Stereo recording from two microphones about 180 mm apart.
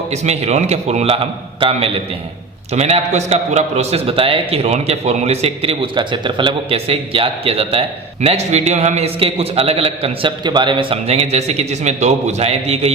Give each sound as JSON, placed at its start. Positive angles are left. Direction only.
{"t": 0.1, "sound": "a man's voice", "side_deg": -40}